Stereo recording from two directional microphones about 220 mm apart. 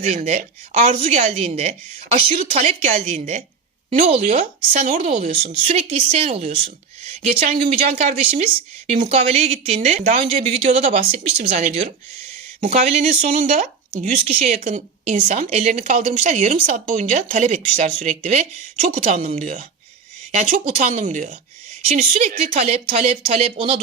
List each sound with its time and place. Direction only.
0.0 s a woman's voice: 30° right (ahead or behind)